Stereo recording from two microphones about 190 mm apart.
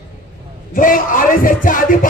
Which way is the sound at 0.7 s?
45° left (ahead or behind).